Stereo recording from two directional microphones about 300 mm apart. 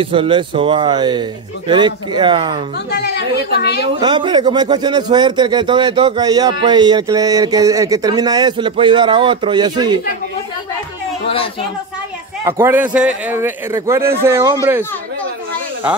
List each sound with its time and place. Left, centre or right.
0.0 s a man's voice: centre
3.0 s a woman's voice: left
4.0 s a man's voice: centre
12.4 s a man's voice: centre